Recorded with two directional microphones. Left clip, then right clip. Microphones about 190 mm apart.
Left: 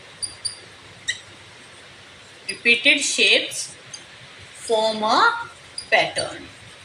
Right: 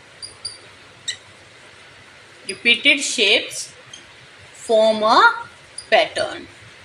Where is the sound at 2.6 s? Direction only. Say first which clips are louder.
Right 1 dB; 30° right (ahead or behind).